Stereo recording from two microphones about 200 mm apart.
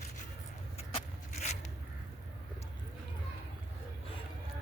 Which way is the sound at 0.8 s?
30° left (ahead or behind).